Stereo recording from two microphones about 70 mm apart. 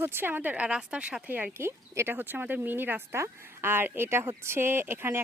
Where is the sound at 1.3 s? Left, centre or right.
Right.